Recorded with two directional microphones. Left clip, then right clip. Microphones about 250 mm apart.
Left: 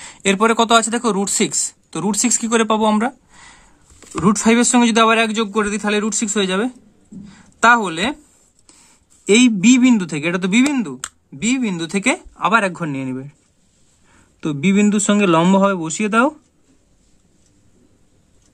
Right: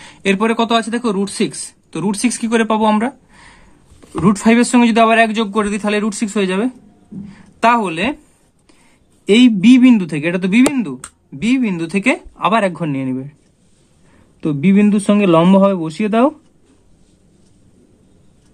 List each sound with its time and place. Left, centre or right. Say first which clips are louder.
0.0 s speech: even; left
9.2 s speech: right 2 dB; centre
14.4 s speech: right 2 dB; centre